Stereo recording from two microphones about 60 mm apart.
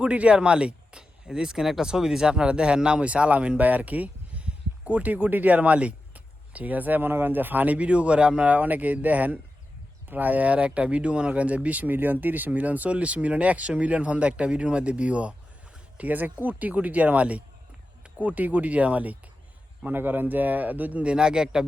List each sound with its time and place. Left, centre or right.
0.0 s speech: centre
8.5 s speech: right; by 21.6 s centre